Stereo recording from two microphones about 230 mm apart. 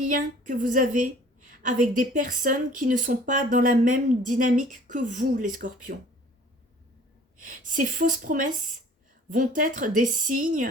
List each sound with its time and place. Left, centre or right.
0.0 s a woman's voice: right
7.3 s a woman's voice: right